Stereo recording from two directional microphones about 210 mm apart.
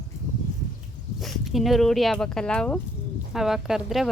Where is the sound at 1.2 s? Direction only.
Centre (ahead or behind).